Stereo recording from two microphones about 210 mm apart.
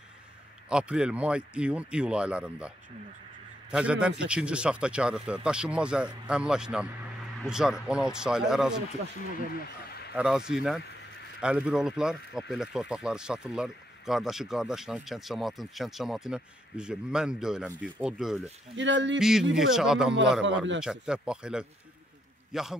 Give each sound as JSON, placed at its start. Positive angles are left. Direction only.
{"t": 0.7, "sound": "speech", "side_deg": -5}
{"t": 3.7, "sound": "speech", "side_deg": -5}
{"t": 9.5, "sound": "a sound", "side_deg": 50}
{"t": 10.1, "sound": "speech", "side_deg": -5}
{"t": 11.4, "sound": "speech", "side_deg": -5}
{"t": 18.8, "sound": "speech", "side_deg": -60}
{"t": 19.1, "sound": "a man's voice", "side_deg": 0}